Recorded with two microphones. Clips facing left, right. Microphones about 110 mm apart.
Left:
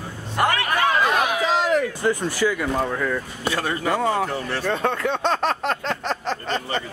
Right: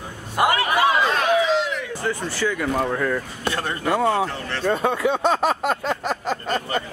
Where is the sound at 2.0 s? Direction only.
15° left (ahead or behind).